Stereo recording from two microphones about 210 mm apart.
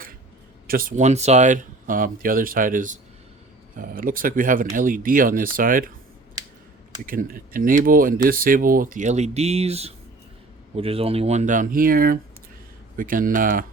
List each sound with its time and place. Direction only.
0.7 s speech: 40° right (ahead or behind)
7.0 s speech: 40° right (ahead or behind)